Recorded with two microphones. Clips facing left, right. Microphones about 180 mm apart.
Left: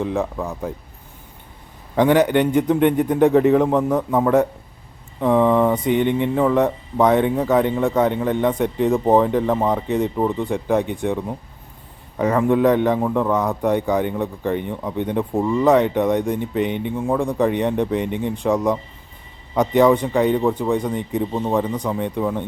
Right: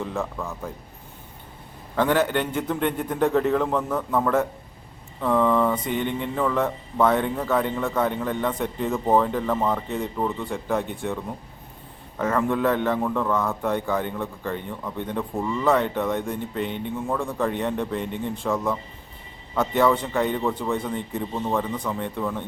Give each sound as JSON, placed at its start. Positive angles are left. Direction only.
{"t": 0.1, "sound": "a man's voice", "side_deg": 20}
{"t": 2.0, "sound": "a man's voice", "side_deg": 15}
{"t": 5.8, "sound": "a sound", "side_deg": 60}
{"t": 6.3, "sound": "a man's voice", "side_deg": 15}
{"t": 12.2, "sound": "a man's voice", "side_deg": 15}
{"t": 16.6, "sound": "a sound", "side_deg": 60}
{"t": 17.1, "sound": "a man's voice", "side_deg": 15}
{"t": 18.0, "sound": "a sound", "side_deg": 65}
{"t": 18.4, "sound": "a man's voice", "side_deg": 15}